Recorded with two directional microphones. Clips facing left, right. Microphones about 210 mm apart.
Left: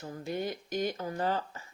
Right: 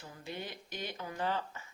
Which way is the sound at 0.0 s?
45° left (ahead or behind).